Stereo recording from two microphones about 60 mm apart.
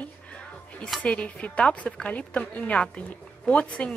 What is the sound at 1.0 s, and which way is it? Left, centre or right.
A woman's voice, left.